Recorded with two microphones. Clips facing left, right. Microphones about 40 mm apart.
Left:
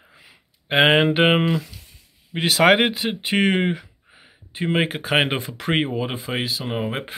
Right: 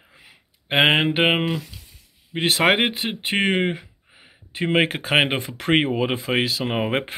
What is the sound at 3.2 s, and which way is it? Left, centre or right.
Speech, right.